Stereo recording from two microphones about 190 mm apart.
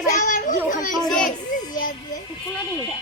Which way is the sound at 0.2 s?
45° left (ahead or behind).